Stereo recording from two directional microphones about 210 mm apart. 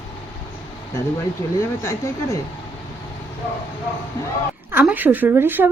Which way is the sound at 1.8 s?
15° left (ahead or behind).